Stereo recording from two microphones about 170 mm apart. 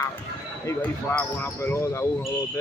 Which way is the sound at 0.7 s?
10° left (ahead or behind).